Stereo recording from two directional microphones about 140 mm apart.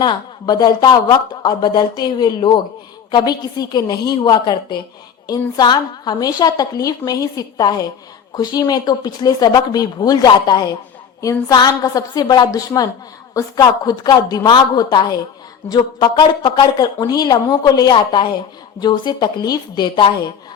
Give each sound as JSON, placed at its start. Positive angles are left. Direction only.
{"t": 0.0, "sound": "a woman's voice", "side_deg": 30}